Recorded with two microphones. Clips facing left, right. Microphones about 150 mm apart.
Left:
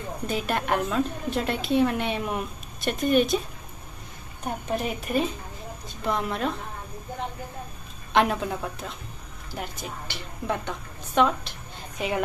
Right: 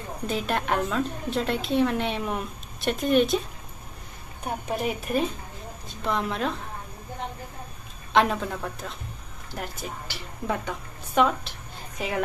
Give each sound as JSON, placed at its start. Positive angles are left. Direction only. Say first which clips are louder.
{"t": 0.3, "sound": "a woman's voice", "louder": "even", "side_deg": 5}
{"t": 4.6, "sound": "a woman's voice", "louder": "right 1 dB", "side_deg": 0}
{"t": 8.1, "sound": "a woman's voice", "louder": "even", "side_deg": 0}